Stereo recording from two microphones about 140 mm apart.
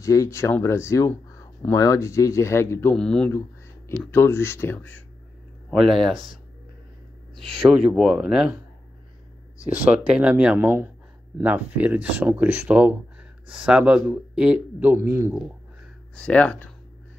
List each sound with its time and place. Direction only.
0.0 s speech: 20° left (ahead or behind)
3.0 s speech: 5° left (ahead or behind)
3.3 s a sound: 20° left (ahead or behind)
4.1 s speech: 15° left (ahead or behind)
5.7 s speech: centre (ahead or behind)
6.1 s speech: 75° left (ahead or behind)
7.3 s speech: centre (ahead or behind)
9.8 s a man's voice: 5° right (ahead or behind)
16.2 s speech: 10° left (ahead or behind)